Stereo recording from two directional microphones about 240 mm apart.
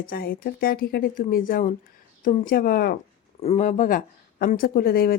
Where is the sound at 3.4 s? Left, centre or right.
Left.